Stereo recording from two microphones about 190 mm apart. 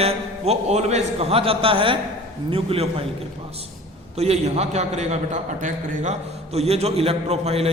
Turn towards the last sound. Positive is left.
turn(degrees=-35)  # may be behind; listen again after turning